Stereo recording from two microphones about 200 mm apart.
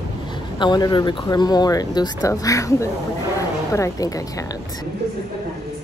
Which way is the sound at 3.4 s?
15° left (ahead or behind).